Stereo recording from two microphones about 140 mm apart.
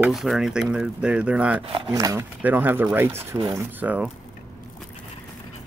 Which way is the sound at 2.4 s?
10° right (ahead or behind).